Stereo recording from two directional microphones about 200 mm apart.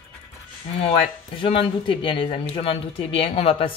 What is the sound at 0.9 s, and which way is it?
Speech, 25° left (ahead or behind).